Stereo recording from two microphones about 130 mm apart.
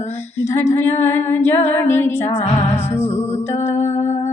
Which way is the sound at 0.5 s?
20° left (ahead or behind).